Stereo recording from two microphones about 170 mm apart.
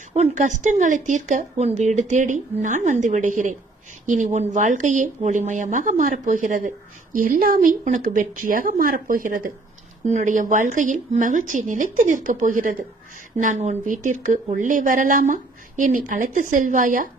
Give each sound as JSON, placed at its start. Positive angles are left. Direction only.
{"t": 0.1, "sound": "speech", "side_deg": -45}